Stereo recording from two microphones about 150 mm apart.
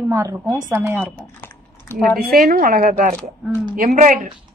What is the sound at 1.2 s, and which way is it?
Typing, 10° left (ahead or behind).